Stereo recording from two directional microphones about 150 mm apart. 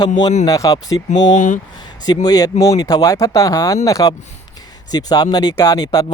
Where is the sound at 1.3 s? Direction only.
55° left (ahead or behind).